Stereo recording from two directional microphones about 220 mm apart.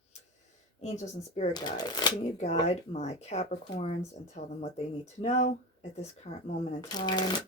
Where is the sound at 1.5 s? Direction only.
20° left (ahead or behind).